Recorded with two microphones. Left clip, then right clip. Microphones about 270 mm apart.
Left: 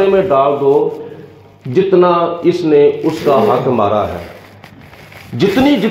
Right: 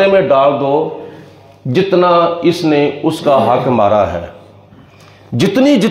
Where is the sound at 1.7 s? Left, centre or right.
Right.